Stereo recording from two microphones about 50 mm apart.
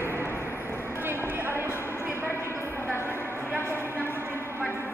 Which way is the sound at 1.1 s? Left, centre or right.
Right.